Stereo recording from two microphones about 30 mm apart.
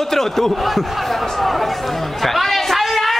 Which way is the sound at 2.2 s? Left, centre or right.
Centre.